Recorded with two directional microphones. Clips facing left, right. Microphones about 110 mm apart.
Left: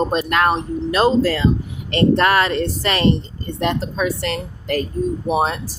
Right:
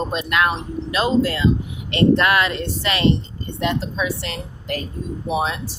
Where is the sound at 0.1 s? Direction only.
40° left (ahead or behind).